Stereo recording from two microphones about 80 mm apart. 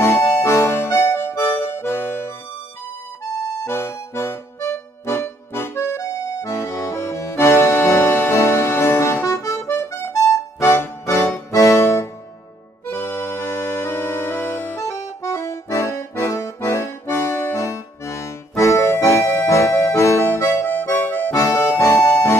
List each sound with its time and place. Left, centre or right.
0.0 s music: left
3.6 s music: left
9.3 s accordion: left
9.7 s music: left
21.4 s accordion: left